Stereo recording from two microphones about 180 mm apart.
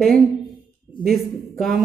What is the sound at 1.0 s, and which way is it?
Speech, centre (ahead or behind).